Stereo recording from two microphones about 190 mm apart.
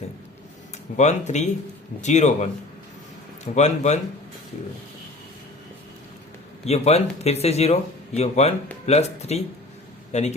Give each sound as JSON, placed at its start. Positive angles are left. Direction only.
{"t": 0.9, "sound": "speech", "side_deg": 40}
{"t": 3.5, "sound": "speech", "side_deg": 35}
{"t": 6.7, "sound": "a man's voice", "side_deg": 35}